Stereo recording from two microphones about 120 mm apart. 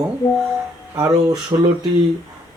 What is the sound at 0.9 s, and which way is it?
Speech, 35° right (ahead or behind).